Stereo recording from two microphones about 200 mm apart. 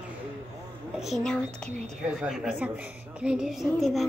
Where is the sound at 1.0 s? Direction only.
Centre (ahead or behind).